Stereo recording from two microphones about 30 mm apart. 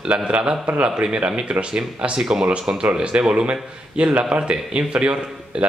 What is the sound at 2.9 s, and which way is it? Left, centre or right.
Speech, right.